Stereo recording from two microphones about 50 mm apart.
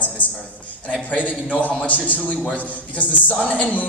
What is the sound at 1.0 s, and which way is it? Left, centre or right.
A man's voice, left.